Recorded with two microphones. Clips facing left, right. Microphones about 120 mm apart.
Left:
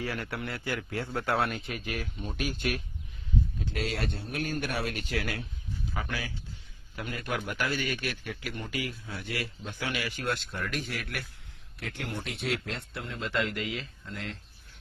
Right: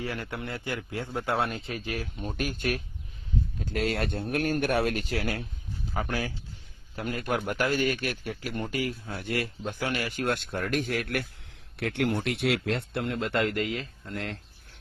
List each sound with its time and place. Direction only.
0.0 s a man's voice: 25° right (ahead or behind); by 11.3 s 50° right (ahead or behind)
11.8 s speech: 65° right (ahead or behind)